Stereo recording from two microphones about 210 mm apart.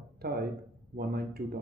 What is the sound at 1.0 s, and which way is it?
Speech, 50° right (ahead or behind).